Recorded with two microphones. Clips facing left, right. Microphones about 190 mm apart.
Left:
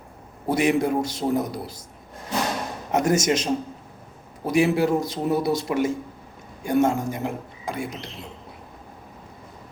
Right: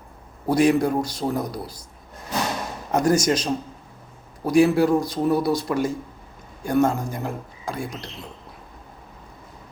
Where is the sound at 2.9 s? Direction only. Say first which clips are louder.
Right 1 dB; 20° left (ahead or behind).